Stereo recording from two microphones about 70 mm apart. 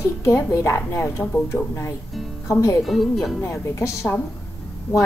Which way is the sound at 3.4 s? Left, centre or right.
Left.